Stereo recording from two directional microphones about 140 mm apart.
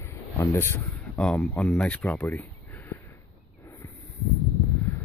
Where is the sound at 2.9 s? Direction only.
20° left (ahead or behind).